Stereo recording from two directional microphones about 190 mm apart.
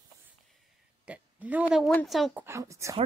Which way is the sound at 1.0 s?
10° right (ahead or behind).